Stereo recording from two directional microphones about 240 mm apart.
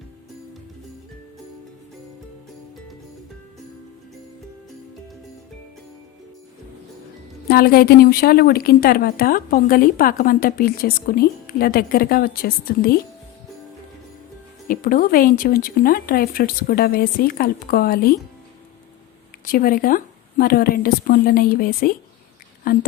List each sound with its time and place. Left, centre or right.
7.4 s a woman's voice: left
14.7 s a woman's voice: left
19.5 s a woman's voice: left